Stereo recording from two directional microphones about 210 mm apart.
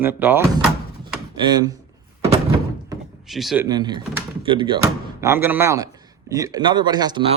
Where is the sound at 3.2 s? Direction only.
Centre (ahead or behind).